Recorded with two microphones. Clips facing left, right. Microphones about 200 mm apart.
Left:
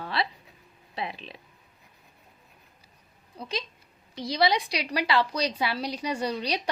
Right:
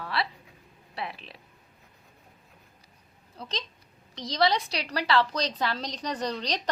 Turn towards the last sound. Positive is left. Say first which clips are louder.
# left 2 dB
turn(degrees=10)  # may be behind; listen again after turning